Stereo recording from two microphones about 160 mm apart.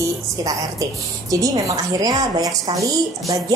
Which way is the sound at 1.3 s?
20° right (ahead or behind).